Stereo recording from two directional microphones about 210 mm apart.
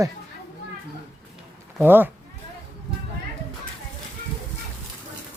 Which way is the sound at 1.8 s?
10° right (ahead or behind).